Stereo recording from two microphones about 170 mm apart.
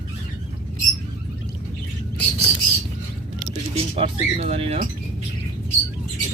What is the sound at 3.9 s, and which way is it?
Speech, 35° right (ahead or behind).